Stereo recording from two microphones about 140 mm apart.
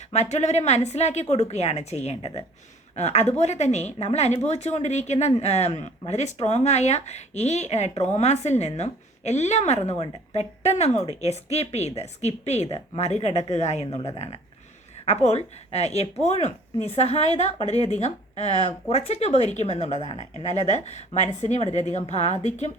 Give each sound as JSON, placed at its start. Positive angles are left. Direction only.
{"t": 0.1, "sound": "speech", "side_deg": 55}